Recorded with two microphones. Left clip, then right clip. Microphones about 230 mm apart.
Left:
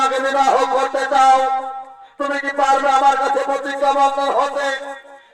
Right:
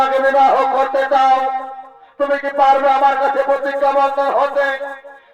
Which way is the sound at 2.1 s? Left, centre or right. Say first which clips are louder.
Right 4 dB; right.